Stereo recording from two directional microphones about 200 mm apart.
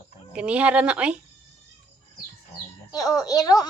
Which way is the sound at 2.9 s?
20° left (ahead or behind).